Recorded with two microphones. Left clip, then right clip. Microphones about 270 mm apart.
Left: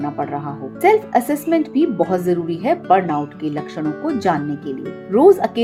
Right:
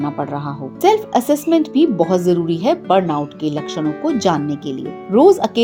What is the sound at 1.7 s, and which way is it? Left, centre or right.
Speech, centre.